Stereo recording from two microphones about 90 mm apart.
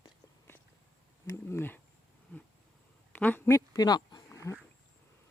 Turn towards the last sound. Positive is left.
turn(degrees=35)  # may be behind; listen again after turning